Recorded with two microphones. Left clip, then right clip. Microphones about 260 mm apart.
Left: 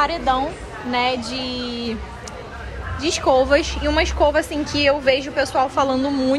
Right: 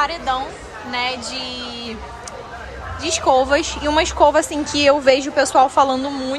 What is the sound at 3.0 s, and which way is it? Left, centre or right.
A woman's voice, centre.